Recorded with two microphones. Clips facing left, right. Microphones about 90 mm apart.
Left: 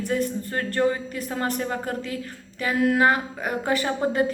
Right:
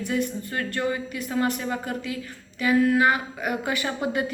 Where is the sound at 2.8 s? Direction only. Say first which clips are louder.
Left 1 dB; 55° left (ahead or behind).